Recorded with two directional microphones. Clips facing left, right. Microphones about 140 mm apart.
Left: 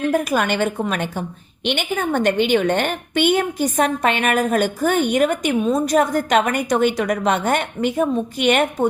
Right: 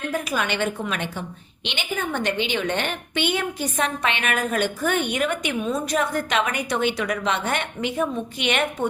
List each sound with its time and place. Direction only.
0.1 s a woman's voice: 50° left (ahead or behind)